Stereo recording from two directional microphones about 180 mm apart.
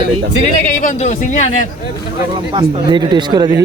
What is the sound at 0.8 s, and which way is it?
Speech, 45° left (ahead or behind).